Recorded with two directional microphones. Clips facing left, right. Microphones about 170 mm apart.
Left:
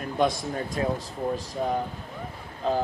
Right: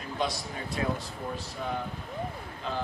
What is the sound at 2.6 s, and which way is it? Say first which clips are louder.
Speech: left 9 dB; 40° left (ahead or behind).